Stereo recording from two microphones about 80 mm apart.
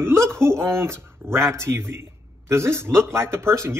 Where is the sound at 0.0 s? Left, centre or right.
Right.